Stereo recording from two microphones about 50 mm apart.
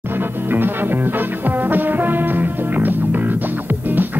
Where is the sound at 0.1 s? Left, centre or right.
Right.